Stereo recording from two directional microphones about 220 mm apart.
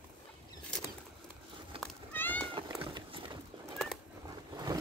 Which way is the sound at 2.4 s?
20° right (ahead or behind).